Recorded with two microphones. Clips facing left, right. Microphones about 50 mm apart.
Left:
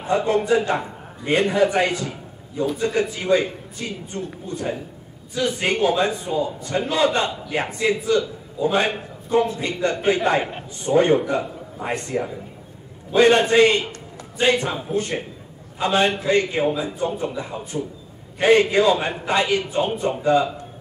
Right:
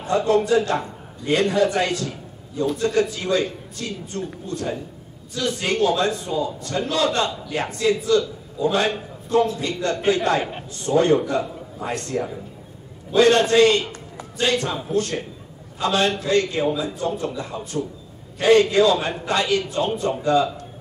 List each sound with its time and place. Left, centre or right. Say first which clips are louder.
0.0 s a man's voice: right 1 dB; centre